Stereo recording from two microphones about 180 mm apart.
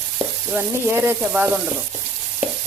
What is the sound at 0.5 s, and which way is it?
Speech, 10° right (ahead or behind).